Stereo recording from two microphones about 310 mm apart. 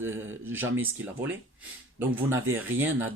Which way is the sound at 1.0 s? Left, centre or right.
Centre.